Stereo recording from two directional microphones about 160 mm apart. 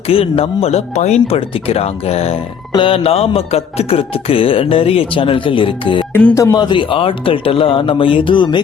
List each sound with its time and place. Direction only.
0.1 s speech: 40° left (ahead or behind)